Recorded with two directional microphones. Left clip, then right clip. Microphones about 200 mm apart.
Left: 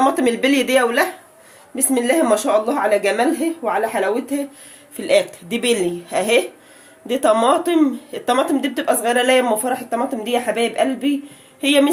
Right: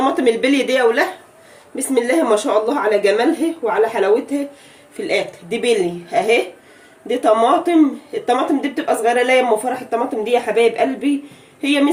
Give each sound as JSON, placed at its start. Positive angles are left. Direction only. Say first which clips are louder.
{"t": 0.0, "sound": "speech", "louder": "right 1 dB", "side_deg": 35}